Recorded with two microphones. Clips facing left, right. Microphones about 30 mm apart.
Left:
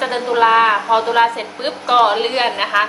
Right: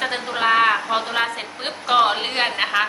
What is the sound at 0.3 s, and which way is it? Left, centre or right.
A woman's voice, centre.